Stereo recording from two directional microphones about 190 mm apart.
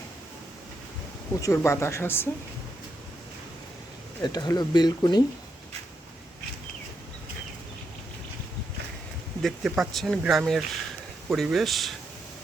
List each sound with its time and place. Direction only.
1.4 s speech: 15° left (ahead or behind)
4.2 s speech: 20° left (ahead or behind)
9.4 s speech: centre (ahead or behind)